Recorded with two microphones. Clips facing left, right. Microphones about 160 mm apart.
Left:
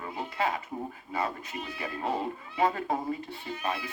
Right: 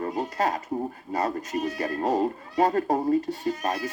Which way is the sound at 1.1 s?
40° right (ahead or behind).